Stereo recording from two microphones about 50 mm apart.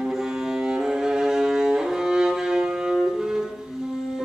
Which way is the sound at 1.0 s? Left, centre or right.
Centre.